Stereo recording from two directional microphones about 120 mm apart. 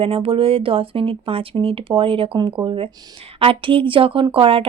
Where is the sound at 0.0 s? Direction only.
50° right (ahead or behind).